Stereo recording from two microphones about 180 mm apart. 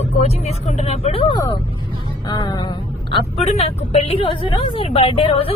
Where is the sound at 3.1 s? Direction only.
35° left (ahead or behind).